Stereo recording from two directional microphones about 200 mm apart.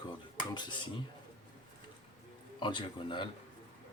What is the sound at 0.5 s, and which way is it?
Speech, 25° left (ahead or behind).